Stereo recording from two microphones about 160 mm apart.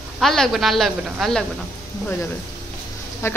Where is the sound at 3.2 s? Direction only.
15° left (ahead or behind).